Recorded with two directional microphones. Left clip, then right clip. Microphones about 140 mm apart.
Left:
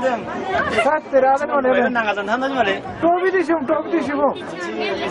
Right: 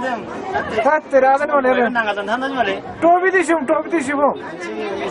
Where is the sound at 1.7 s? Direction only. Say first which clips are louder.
Right 1 dB; centre (ahead or behind).